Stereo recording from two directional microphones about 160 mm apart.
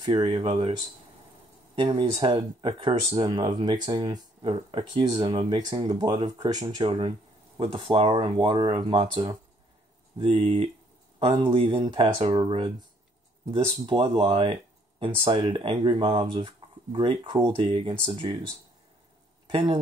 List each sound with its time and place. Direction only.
0.0 s speech: 30° right (ahead or behind)
1.8 s speech: 30° right (ahead or behind)
10.1 s speech: 35° right (ahead or behind)